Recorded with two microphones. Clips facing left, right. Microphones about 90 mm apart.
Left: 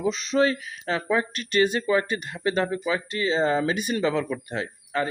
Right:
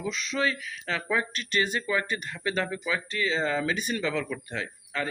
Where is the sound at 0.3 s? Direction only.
40° left (ahead or behind).